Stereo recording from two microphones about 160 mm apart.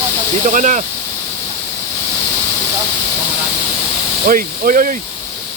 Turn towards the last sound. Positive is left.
turn(degrees=-60)  # may be behind; listen again after turning